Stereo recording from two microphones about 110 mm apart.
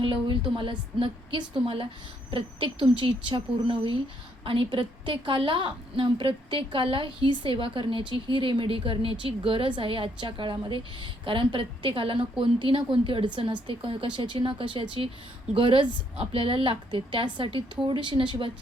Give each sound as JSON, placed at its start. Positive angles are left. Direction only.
{"t": 0.0, "sound": "a woman's voice", "side_deg": -50}